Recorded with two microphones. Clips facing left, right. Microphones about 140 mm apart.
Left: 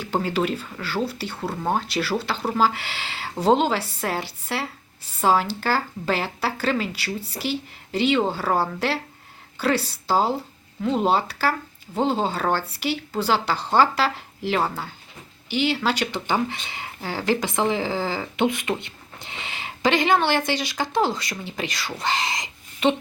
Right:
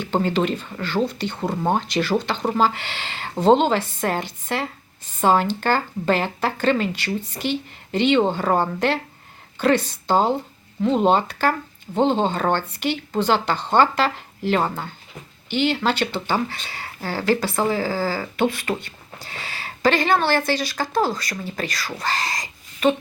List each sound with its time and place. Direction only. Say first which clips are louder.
0.0 s speech: right 3 dB; 10° left (ahead or behind)